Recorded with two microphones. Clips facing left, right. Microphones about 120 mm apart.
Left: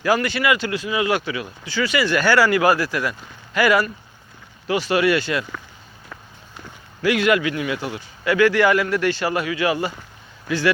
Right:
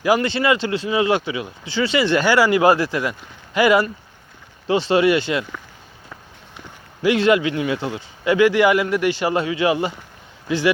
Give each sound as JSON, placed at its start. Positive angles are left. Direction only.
{"t": 0.0, "sound": "speech", "side_deg": -20}
{"t": 7.0, "sound": "speech", "side_deg": -25}